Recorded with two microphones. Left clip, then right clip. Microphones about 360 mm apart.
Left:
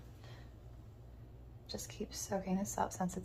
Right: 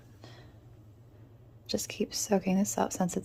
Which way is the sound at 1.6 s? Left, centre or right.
Right.